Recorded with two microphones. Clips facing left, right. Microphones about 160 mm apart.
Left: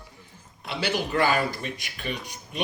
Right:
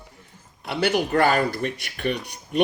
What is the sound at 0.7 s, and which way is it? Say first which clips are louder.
Speech: right 5 dB; 55° right (ahead or behind).